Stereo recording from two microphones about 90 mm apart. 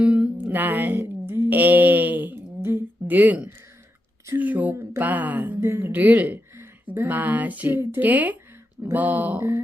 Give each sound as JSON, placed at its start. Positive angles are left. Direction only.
{"t": 0.0, "sound": "music", "side_deg": -15}
{"t": 0.4, "sound": "a sound", "side_deg": -20}
{"t": 4.4, "sound": "speech", "side_deg": -20}